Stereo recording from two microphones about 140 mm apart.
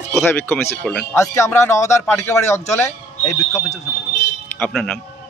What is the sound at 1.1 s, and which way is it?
Speech, 20° left (ahead or behind).